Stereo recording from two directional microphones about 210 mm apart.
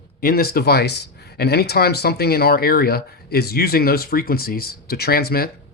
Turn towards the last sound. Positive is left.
turn(degrees=45)  # may be behind; listen again after turning